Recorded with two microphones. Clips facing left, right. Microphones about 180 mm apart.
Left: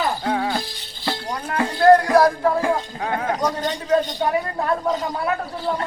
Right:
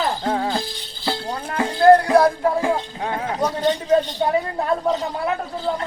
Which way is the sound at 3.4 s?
10° right (ahead or behind).